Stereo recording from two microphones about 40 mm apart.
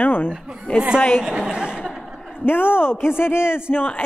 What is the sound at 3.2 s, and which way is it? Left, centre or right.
Speech, left.